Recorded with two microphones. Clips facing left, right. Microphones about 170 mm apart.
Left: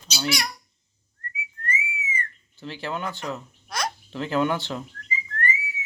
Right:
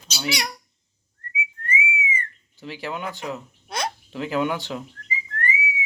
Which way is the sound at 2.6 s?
10° right (ahead or behind).